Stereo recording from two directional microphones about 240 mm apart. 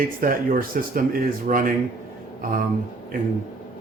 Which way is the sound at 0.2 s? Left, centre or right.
Right.